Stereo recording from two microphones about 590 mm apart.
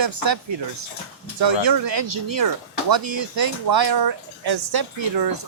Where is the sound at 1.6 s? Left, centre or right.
Right.